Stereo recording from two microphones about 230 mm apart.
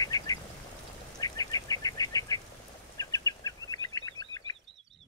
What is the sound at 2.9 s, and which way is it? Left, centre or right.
Goose, centre.